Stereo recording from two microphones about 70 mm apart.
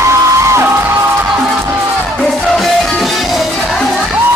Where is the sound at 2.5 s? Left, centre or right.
Centre.